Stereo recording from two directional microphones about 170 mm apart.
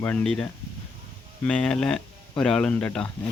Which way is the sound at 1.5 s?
5° left (ahead or behind).